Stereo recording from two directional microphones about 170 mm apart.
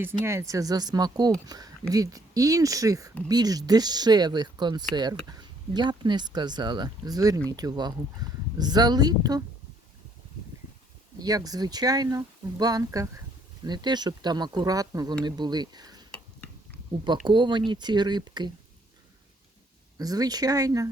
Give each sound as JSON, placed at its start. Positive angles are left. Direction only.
{"t": 0.0, "sound": "speech", "side_deg": -15}
{"t": 11.2, "sound": "speech", "side_deg": -20}
{"t": 17.2, "sound": "speech", "side_deg": -25}
{"t": 20.0, "sound": "speech", "side_deg": -20}